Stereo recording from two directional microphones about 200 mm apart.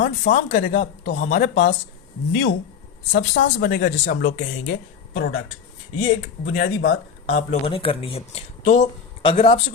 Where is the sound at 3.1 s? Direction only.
60° left (ahead or behind).